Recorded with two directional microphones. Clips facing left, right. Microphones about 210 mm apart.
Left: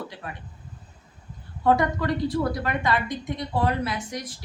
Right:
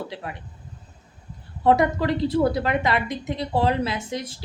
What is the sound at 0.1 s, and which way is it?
Speech, 25° right (ahead or behind).